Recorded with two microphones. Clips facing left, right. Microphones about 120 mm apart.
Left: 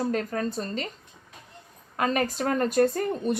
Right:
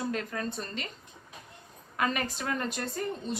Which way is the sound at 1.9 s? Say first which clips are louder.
Left 5 dB; 40° left (ahead or behind).